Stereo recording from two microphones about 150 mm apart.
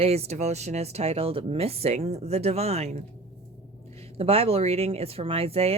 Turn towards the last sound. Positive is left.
turn(degrees=-40)  # may be behind; listen again after turning